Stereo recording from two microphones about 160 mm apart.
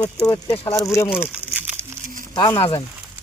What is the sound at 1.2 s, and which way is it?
Crumpling, 10° right (ahead or behind).